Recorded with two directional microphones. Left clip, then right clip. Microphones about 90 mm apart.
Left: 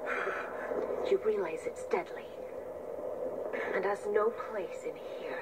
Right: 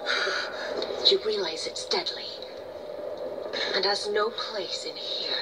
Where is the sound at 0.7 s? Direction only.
55° left (ahead or behind).